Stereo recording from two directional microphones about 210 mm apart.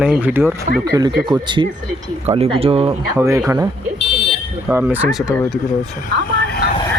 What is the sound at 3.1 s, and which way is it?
Speech, 15° right (ahead or behind).